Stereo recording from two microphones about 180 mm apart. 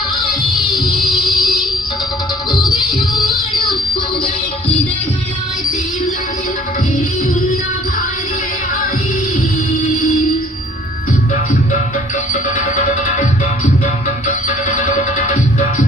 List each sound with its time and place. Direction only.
0.2 s music: 25° left (ahead or behind)
2.5 s music: 25° left (ahead or behind)
12.3 s music: 45° left (ahead or behind)